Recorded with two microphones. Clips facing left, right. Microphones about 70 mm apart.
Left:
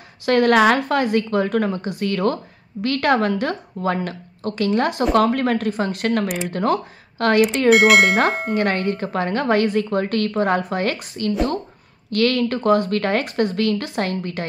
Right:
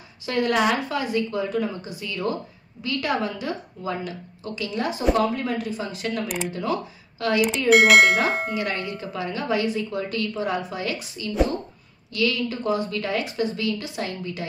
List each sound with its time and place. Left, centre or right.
0.3 s speech: left
7.7 s speech: centre
8.5 s a woman's voice: left